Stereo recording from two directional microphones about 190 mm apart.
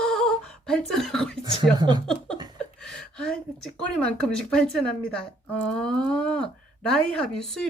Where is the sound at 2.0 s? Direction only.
5° left (ahead or behind).